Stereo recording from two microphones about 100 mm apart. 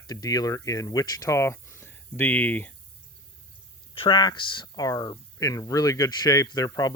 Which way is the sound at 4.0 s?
50° left (ahead or behind).